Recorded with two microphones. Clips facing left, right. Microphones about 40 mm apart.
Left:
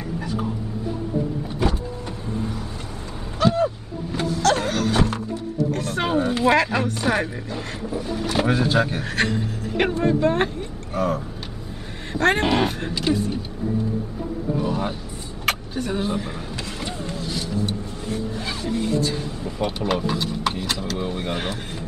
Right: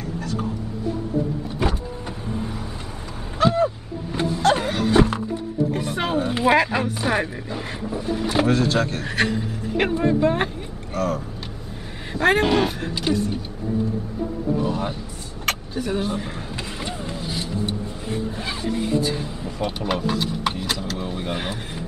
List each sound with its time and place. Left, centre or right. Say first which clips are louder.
3.3 s a sound: right 1 dB; centre
6.4 s vehicle: right 2 dB; centre
8.5 s speech: even; centre
9.0 s speech: even; centre
10.9 s speech: left 1 dB; centre
12.1 s speech: right 1 dB; centre
14.6 s vehicle: even; centre
15.8 s speech: right 1 dB; centre
16.2 s a sound: left 1 dB; centre
18.7 s speech: even; centre
18.9 s a sound: right 1 dB; centre
19.6 s speech: left 1 dB; centre
21.0 s speech: left 2 dB; centre
21.3 s speech: left 1 dB; centre